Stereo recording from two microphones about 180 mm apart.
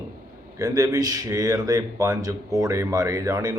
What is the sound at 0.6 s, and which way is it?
Speech, 20° right (ahead or behind).